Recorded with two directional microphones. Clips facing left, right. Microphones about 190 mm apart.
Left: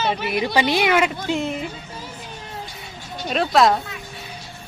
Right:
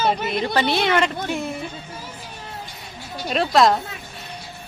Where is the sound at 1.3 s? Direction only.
20° left (ahead or behind).